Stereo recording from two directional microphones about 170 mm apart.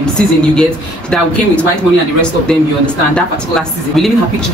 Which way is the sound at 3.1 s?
5° left (ahead or behind).